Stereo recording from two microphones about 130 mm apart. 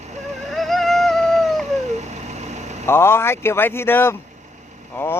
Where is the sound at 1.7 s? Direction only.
60° right (ahead or behind).